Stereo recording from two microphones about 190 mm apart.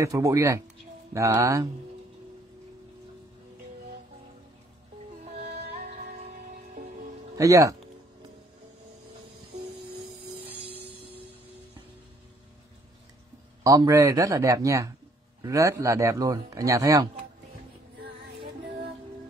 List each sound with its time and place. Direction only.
0.0 s speech: 15° right (ahead or behind)
7.3 s speech: 15° right (ahead or behind)
10.9 s a sound: 30° left (ahead or behind)
13.7 s speech: 15° right (ahead or behind)